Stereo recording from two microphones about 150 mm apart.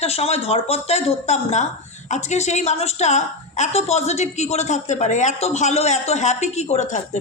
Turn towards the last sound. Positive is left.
turn(degrees=50)  # may be behind; listen again after turning